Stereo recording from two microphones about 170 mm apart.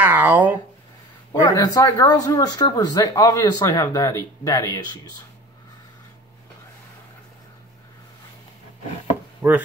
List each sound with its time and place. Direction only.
0.0 s a sound: 10° right (ahead or behind)
1.4 s speech: 20° left (ahead or behind)
9.4 s speech: 10° right (ahead or behind)